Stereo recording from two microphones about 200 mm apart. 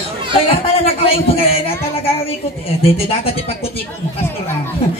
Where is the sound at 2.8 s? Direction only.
30° left (ahead or behind).